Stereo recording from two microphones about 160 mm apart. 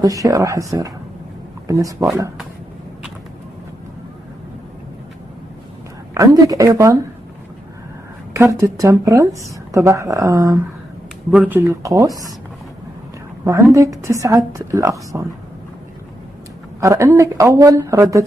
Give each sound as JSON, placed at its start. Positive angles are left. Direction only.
{"t": 0.0, "sound": "a woman's voice", "side_deg": -20}
{"t": 1.7, "sound": "a woman's voice", "side_deg": -20}
{"t": 6.1, "sound": "a woman's voice", "side_deg": -20}
{"t": 8.3, "sound": "a woman's voice", "side_deg": -20}
{"t": 13.5, "sound": "a woman's voice", "side_deg": -20}
{"t": 16.8, "sound": "a woman's voice", "side_deg": -20}